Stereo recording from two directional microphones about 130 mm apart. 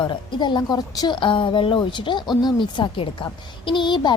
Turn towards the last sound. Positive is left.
turn(degrees=35)  # may be behind; listen again after turning